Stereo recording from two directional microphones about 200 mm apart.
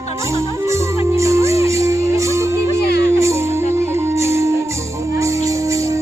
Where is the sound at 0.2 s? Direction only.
15° right (ahead or behind).